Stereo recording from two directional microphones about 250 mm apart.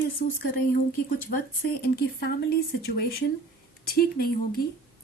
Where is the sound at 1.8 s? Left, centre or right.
Left.